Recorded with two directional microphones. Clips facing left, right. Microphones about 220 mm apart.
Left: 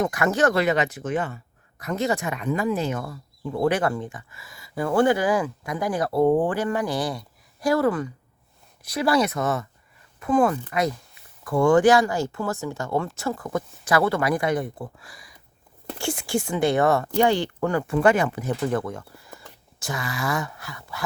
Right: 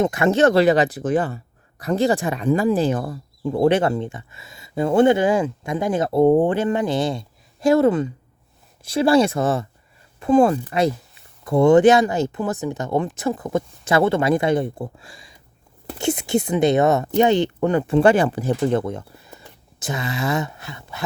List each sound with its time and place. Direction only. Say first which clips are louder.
0.0 s speech: right 5 dB; 25° right (ahead or behind)